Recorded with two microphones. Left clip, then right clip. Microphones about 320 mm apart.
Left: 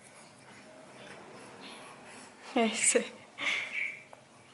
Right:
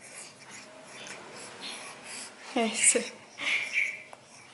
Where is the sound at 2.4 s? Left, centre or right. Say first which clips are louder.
Right 2 dB; centre.